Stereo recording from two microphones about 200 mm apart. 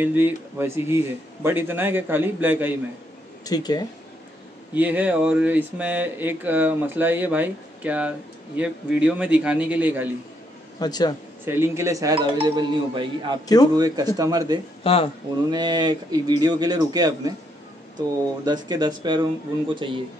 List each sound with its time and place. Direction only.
0.0 s speech: 10° right (ahead or behind)
3.4 s a man's voice: 20° left (ahead or behind)
4.7 s speech: 10° right (ahead or behind)
10.8 s a man's voice: 20° left (ahead or behind)
11.4 s speech: 10° right (ahead or behind)
14.8 s speech: 30° left (ahead or behind)
15.5 s speech: 20° right (ahead or behind)